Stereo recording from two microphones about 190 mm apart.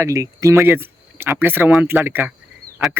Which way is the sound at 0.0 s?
15° right (ahead or behind).